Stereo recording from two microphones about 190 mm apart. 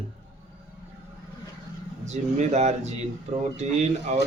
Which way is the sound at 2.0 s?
35° right (ahead or behind).